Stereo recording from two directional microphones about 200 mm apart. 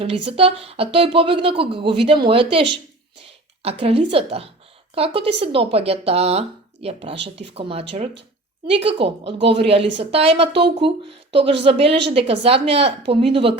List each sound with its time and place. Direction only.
0.0 s speech: 30° right (ahead or behind)